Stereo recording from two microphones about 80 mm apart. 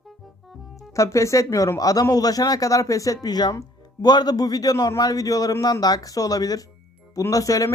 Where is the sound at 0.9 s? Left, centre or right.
Left.